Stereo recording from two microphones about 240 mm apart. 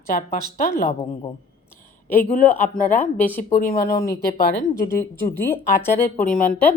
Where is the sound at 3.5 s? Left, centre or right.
Left.